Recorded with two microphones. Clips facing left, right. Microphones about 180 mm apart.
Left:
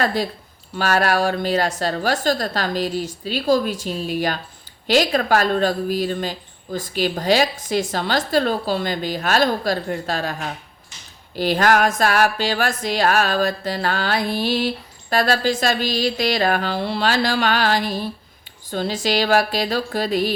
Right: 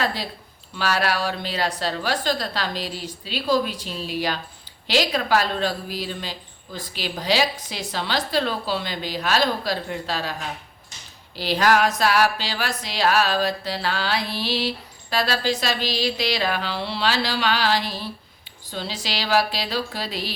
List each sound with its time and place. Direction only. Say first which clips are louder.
0.0 s a woman's voice: left 5 dB; 45° left (ahead or behind)
11.3 s a woman's voice: left 2 dB; 50° left (ahead or behind)